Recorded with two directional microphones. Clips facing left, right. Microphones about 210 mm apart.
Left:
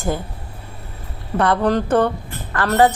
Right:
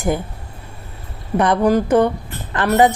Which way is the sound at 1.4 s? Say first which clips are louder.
Right 2 dB; 15° right (ahead or behind).